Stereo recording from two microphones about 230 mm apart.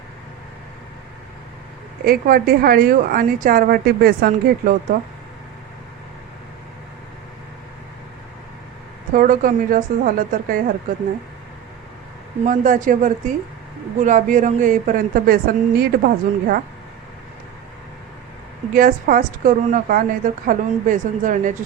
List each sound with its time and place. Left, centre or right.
2.0 s a woman's voice: right
9.1 s a woman's voice: right
12.5 s a woman's voice: right
18.7 s a woman's voice: right